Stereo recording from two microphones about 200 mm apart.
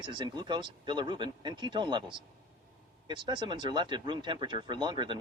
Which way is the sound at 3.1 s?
20° right (ahead or behind).